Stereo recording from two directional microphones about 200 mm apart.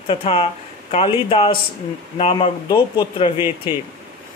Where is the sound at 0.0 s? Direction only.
30° left (ahead or behind).